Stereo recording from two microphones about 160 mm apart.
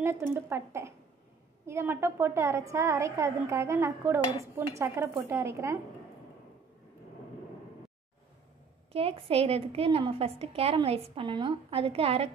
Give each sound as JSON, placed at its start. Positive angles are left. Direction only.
{"t": 0.0, "sound": "a woman's voice", "side_deg": -15}
{"t": 8.9, "sound": "a woman's voice", "side_deg": -35}